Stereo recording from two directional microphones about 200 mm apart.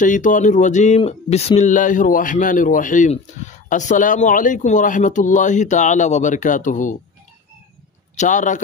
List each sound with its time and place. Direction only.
0.0 s speech: 40° left (ahead or behind)
8.2 s speech: 40° left (ahead or behind)